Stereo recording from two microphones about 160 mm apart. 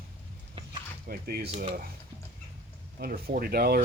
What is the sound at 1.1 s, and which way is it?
Speech, 70° right (ahead or behind).